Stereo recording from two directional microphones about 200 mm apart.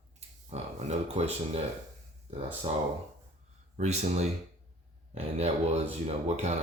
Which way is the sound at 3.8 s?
35° right (ahead or behind).